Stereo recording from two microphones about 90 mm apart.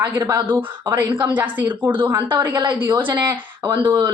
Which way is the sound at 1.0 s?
55° right (ahead or behind).